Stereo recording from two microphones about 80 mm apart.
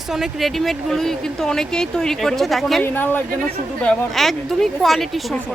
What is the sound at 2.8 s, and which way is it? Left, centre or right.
Speech, left.